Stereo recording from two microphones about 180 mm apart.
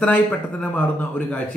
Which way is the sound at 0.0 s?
10° left (ahead or behind).